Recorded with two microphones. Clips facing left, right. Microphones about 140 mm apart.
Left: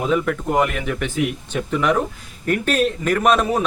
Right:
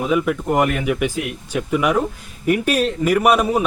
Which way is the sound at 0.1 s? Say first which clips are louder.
Right 2 dB; 10° right (ahead or behind).